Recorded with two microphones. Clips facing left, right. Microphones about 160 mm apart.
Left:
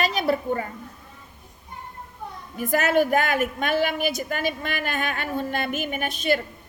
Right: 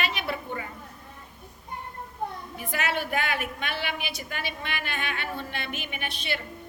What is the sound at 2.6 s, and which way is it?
A woman's voice, 45° left (ahead or behind).